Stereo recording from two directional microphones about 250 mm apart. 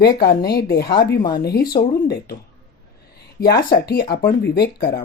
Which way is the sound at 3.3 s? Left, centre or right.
Left.